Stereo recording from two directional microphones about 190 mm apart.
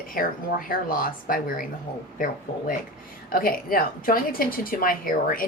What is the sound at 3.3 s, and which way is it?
A woman's voice, 50° left (ahead or behind).